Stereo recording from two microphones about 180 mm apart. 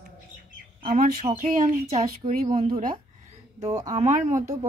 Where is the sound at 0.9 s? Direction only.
45° right (ahead or behind).